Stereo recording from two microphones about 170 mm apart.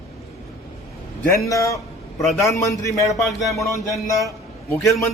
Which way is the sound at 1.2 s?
20° left (ahead or behind).